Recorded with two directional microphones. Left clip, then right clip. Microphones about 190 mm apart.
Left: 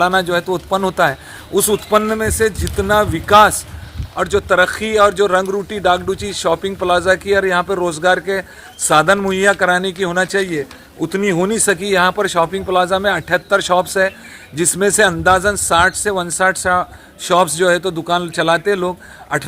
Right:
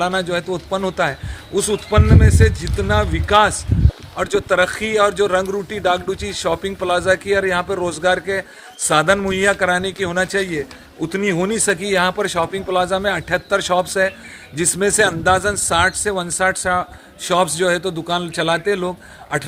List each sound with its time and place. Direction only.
0.0 s speech: 25° left (ahead or behind)